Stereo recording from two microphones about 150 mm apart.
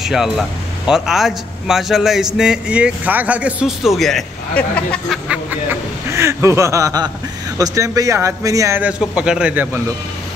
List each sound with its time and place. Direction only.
0.0 s speech: 5° right (ahead or behind)
5.3 s a man's voice: 15° right (ahead or behind)